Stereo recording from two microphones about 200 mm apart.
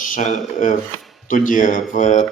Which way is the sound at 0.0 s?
40° left (ahead or behind).